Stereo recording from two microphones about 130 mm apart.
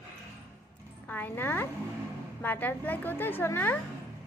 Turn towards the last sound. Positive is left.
turn(degrees=15)  # may be behind; listen again after turning